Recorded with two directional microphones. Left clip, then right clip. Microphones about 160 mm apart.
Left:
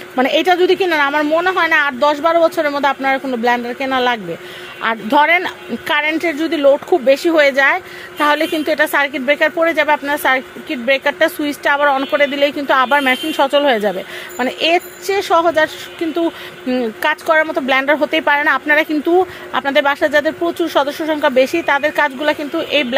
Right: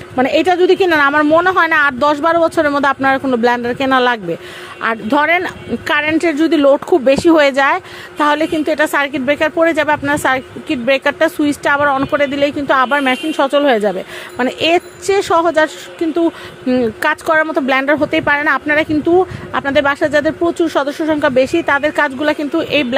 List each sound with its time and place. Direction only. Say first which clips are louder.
0.1 s a woman's voice: right 1 dB; 20° right (ahead or behind); by 4.2 s 45° right (ahead or behind)
4.8 s a woman's voice: left 1 dB; 30° right (ahead or behind)